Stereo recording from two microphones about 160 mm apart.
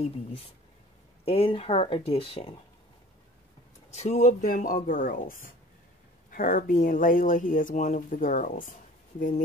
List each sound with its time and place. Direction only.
1.2 s speech: 35° left (ahead or behind)
3.9 s speech: 45° left (ahead or behind)